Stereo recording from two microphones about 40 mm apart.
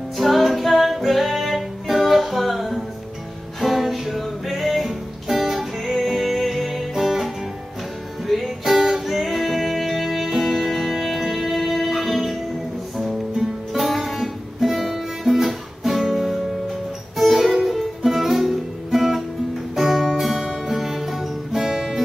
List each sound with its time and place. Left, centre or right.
0.2 s music: centre
8.3 s music: centre